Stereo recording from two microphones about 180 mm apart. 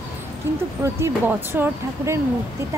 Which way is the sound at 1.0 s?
15° right (ahead or behind).